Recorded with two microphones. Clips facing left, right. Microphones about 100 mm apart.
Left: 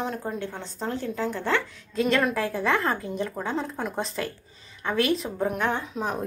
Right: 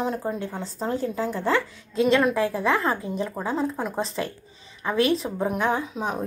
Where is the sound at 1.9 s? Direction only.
Centre (ahead or behind).